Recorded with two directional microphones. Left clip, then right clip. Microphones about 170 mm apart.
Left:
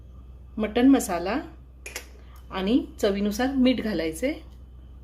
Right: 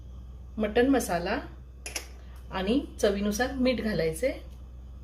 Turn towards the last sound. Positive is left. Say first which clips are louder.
# left 1 dB
turn(degrees=50)  # may be behind; listen again after turning